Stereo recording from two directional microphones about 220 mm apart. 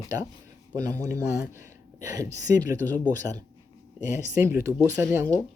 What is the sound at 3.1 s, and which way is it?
Speech, 15° right (ahead or behind).